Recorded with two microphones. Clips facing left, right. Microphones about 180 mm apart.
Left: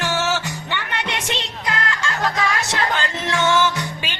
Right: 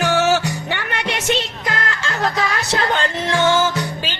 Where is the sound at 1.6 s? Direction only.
45° right (ahead or behind).